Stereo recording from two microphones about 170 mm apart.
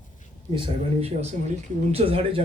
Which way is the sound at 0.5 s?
35° right (ahead or behind).